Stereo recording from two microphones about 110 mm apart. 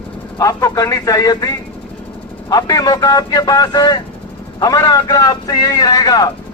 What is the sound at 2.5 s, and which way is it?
A man's voice, 35° left (ahead or behind).